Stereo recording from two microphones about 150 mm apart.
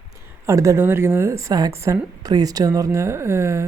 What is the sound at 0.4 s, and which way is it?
Speech, 20° right (ahead or behind).